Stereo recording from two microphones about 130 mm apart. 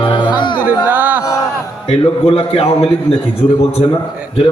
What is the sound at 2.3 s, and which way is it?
Speech, 45° left (ahead or behind).